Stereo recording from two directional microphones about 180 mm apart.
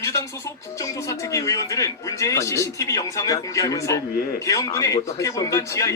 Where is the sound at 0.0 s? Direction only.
15° left (ahead or behind).